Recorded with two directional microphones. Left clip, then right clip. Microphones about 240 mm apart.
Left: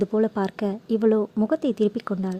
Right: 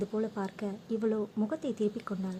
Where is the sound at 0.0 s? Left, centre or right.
Left.